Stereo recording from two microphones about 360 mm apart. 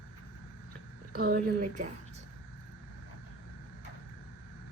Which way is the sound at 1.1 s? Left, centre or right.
Right.